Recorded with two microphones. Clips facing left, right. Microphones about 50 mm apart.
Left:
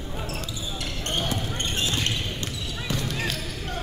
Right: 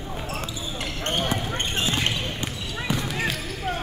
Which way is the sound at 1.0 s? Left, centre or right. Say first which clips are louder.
Right 3 dB; right.